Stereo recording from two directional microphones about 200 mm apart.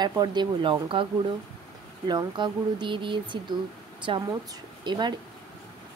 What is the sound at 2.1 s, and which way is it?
Speech, 20° right (ahead or behind).